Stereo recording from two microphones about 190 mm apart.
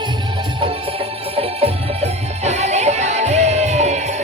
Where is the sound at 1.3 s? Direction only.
35° right (ahead or behind).